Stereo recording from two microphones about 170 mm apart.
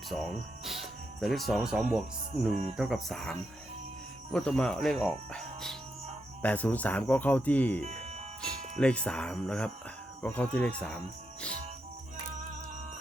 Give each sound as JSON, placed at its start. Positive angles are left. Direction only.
{"t": 0.1, "sound": "speech", "side_deg": 0}
{"t": 7.9, "sound": "music", "side_deg": -40}
{"t": 8.4, "sound": "speech", "side_deg": 5}